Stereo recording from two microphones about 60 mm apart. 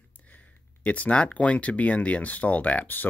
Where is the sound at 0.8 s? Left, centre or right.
Left.